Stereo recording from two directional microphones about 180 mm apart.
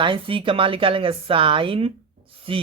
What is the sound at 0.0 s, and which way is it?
Speech, 30° right (ahead or behind).